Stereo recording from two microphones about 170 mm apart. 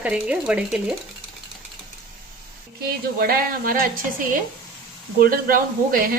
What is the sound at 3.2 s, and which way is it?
Speech, 60° right (ahead or behind).